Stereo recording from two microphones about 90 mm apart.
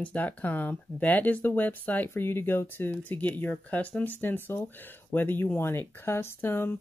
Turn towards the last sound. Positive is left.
turn(degrees=25)  # may be behind; listen again after turning